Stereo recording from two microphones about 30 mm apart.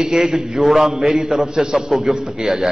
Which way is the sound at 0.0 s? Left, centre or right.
Right.